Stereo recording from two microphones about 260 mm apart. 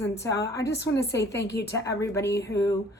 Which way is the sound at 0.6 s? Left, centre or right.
Left.